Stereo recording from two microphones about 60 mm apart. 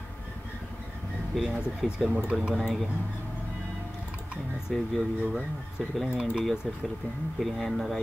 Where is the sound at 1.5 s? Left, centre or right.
Centre.